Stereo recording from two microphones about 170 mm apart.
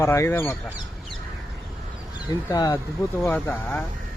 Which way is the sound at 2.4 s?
20° left (ahead or behind).